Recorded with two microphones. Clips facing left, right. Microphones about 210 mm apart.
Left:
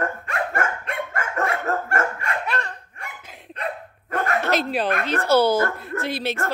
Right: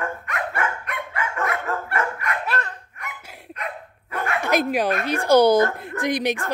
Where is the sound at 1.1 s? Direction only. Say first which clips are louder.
Even; 45° left (ahead or behind).